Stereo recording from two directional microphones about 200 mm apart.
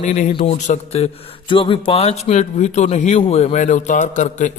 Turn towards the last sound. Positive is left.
turn(degrees=40)  # may be behind; listen again after turning